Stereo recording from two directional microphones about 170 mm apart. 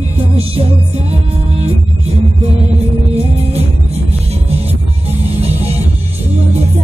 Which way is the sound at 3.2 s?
35° right (ahead or behind).